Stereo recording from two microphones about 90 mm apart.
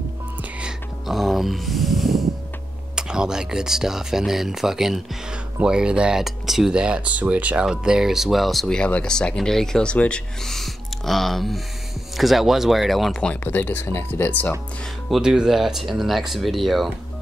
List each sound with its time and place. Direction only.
0.4 s music: 10° right (ahead or behind)
1.0 s speech: centre (ahead or behind)
13.2 s speech: 20° left (ahead or behind)
15.0 s speech: 5° right (ahead or behind)